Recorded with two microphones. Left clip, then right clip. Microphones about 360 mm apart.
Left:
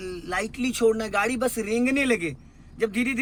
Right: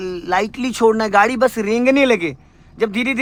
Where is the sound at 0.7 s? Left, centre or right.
Centre.